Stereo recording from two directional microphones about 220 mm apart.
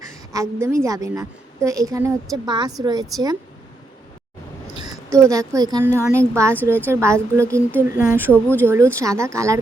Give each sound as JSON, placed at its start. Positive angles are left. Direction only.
{"t": 0.3, "sound": "a woman's voice", "side_deg": -10}
{"t": 5.1, "sound": "a woman's voice", "side_deg": -15}
{"t": 8.3, "sound": "speech", "side_deg": 10}
{"t": 8.6, "sound": "a woman's voice", "side_deg": -10}